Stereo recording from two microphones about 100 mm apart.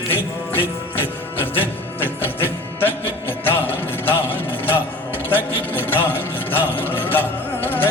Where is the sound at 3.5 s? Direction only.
20° left (ahead or behind).